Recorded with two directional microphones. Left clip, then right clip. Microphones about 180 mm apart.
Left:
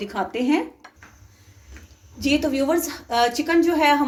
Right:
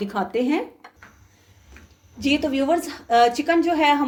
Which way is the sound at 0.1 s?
40° right (ahead or behind).